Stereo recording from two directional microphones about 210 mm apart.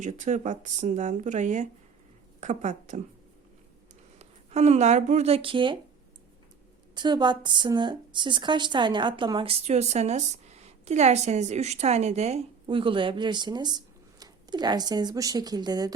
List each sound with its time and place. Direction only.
0.0 s speech: 35° right (ahead or behind)
4.2 s speech: 30° right (ahead or behind)
6.9 s speech: 20° right (ahead or behind)